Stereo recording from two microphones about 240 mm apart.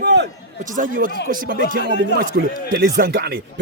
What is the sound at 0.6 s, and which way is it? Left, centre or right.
A man's voice, right.